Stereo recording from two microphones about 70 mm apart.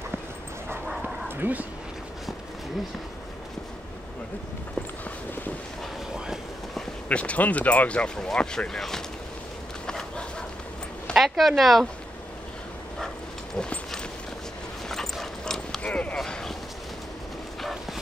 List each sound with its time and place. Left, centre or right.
1.3 s speech: right
6.1 s train: centre
7.1 s speech: centre
9.8 s dog: centre
11.1 s speech: centre
13.6 s a sound: centre
14.9 s dog: centre
15.8 s a sound: centre
16.2 s a sound: centre